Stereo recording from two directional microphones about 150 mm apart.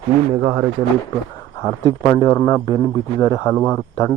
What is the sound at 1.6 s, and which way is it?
A man's voice, 25° left (ahead or behind).